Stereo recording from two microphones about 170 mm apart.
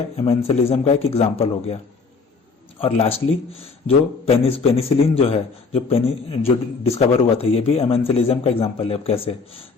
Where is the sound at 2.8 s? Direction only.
35° left (ahead or behind).